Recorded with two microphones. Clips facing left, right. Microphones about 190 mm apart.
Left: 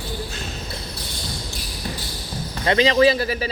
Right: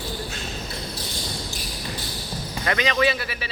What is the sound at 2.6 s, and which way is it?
Speech, 30° left (ahead or behind).